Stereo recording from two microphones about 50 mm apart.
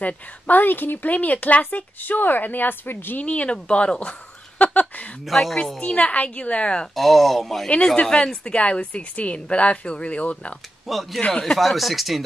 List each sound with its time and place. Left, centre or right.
0.0 s a woman's voice: left
3.2 s a woman's voice: left
4.6 s a sound: left
5.2 s speech: centre
5.8 s a woman's voice: left
7.0 s speech: centre
7.7 s a woman's voice: left
10.9 s speech: centre
11.1 s a woman's voice: left
11.4 s speech: centre